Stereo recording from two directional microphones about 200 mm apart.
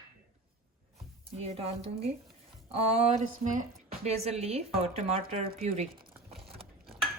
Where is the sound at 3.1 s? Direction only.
40° right (ahead or behind).